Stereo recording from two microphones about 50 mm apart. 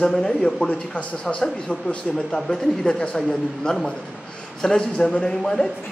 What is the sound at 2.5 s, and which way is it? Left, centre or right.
A man's voice, centre.